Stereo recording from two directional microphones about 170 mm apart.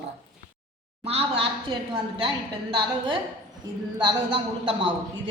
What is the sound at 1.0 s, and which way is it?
A woman's voice, 35° right (ahead or behind).